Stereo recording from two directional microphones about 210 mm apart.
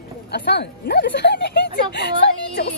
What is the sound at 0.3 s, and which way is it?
Speech, 50° left (ahead or behind).